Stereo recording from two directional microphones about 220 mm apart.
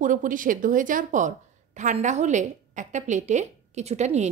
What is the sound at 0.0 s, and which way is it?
A woman's voice, 35° right (ahead or behind).